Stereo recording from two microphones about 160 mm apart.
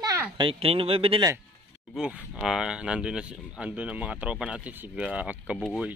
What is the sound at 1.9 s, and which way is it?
Speech, 5° right (ahead or behind).